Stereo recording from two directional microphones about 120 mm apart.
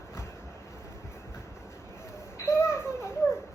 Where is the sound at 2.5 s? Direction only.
25° left (ahead or behind).